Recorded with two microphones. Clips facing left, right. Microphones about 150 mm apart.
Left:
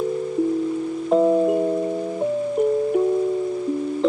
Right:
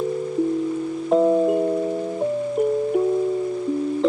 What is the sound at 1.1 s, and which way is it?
Music, centre (ahead or behind).